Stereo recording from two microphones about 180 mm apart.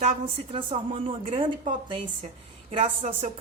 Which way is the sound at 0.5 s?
30° right (ahead or behind).